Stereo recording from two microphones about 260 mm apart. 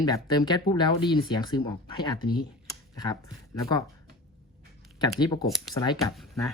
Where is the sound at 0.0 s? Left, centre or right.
Centre.